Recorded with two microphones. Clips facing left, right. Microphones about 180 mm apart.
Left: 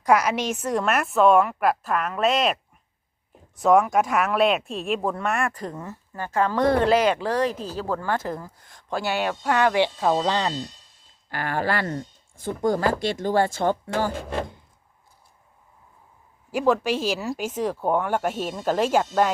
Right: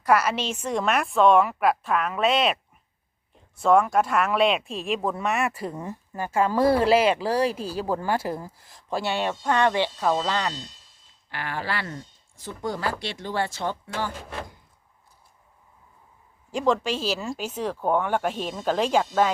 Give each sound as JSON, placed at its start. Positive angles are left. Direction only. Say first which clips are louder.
{"t": 0.0, "sound": "a woman's voice", "louder": "left 2 dB", "side_deg": 15}
{"t": 3.6, "sound": "a woman's voice", "louder": "left 1 dB", "side_deg": 10}
{"t": 11.3, "sound": "speech", "louder": "left 5 dB", "side_deg": 45}
{"t": 16.5, "sound": "speech", "louder": "left 2 dB", "side_deg": 5}